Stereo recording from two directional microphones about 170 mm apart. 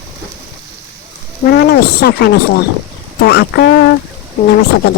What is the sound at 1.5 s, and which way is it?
Speech, 70° left (ahead or behind).